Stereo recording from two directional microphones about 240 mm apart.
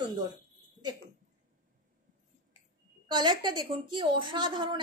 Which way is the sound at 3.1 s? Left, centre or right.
Centre.